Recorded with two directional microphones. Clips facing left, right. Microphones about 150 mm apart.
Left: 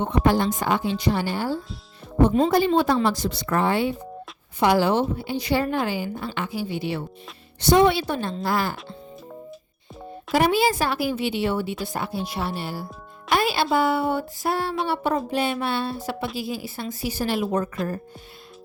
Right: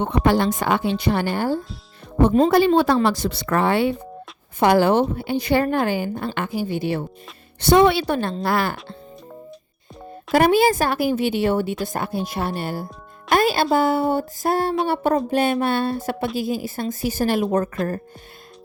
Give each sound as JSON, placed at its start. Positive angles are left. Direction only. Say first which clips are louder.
{"t": 0.0, "sound": "speech", "louder": "right 2 dB", "side_deg": -70}
{"t": 2.5, "sound": "speech", "louder": "right 4 dB", "side_deg": -70}
{"t": 4.6, "sound": "speech", "louder": "right 3 dB", "side_deg": -55}
{"t": 7.6, "sound": "a woman's voice", "louder": "right 2 dB", "side_deg": -65}
{"t": 10.3, "sound": "speech", "louder": "right 4 dB", "side_deg": -50}